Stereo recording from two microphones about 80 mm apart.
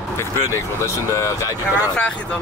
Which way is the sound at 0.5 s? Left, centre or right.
Left.